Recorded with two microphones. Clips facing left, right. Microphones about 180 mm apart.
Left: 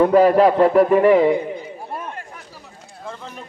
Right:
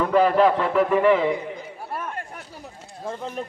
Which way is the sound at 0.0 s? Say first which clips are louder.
Left 5 dB; 40° left (ahead or behind).